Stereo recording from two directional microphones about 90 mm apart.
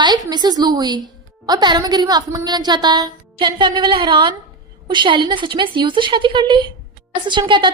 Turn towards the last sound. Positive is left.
turn(degrees=-60)  # may be behind; listen again after turning